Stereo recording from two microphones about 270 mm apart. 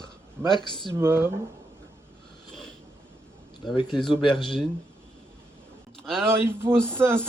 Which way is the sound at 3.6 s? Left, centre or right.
Centre.